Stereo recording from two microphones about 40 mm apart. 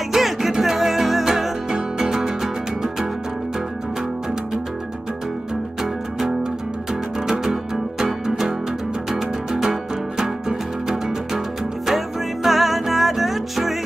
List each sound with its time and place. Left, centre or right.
0.1 s music: centre
8.0 s music: centre
9.5 s music: centre